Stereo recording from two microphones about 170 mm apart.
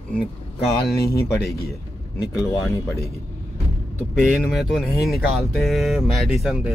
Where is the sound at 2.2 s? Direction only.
25° left (ahead or behind).